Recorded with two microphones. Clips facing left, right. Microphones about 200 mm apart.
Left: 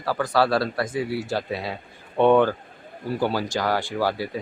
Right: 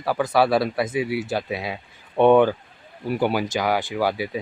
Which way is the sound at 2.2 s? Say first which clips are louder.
Right 2 dB; 15° right (ahead or behind).